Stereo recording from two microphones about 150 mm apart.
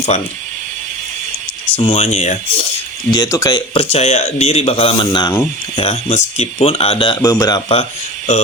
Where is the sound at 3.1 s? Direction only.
25° left (ahead or behind).